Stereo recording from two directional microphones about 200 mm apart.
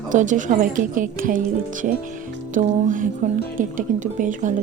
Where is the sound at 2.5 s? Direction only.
40° right (ahead or behind).